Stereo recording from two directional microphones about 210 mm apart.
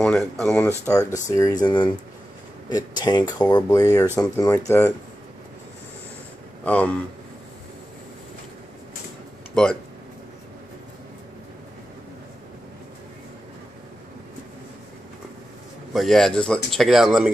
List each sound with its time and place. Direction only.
0.0 s speech: centre (ahead or behind)
6.6 s speech: 5° left (ahead or behind)
9.6 s speech: 5° left (ahead or behind)
15.9 s speech: centre (ahead or behind)